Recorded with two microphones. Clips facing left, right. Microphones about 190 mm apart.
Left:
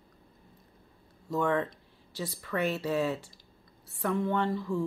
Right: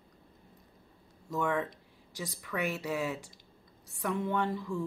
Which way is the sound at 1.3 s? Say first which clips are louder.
Left 3 dB; 5° right (ahead or behind).